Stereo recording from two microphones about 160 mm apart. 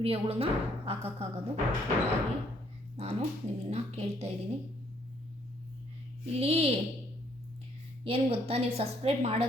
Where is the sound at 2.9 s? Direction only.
40° right (ahead or behind).